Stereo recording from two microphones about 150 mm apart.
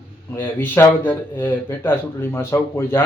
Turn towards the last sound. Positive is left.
turn(degrees=15)  # may be behind; listen again after turning